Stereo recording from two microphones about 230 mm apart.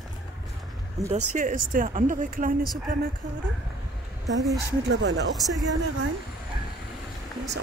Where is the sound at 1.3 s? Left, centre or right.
Right.